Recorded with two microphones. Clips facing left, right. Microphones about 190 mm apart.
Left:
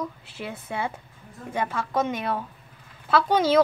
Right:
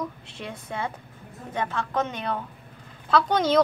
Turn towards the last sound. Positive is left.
turn(degrees=5)  # may be behind; listen again after turning